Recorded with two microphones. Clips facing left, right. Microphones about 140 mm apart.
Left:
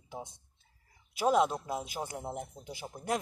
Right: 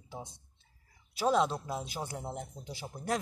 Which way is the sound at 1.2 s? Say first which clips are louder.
Left 1 dB; 10° left (ahead or behind).